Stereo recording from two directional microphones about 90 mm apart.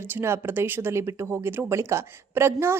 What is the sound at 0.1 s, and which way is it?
Speech, 25° right (ahead or behind).